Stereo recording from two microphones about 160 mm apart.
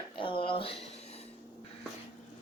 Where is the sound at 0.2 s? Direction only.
30° left (ahead or behind).